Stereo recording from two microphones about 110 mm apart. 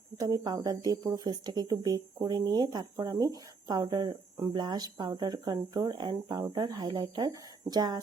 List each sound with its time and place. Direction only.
0.2 s speech: 35° right (ahead or behind)